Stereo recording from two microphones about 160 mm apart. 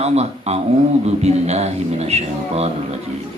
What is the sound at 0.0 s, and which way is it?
A man's voice, 40° right (ahead or behind).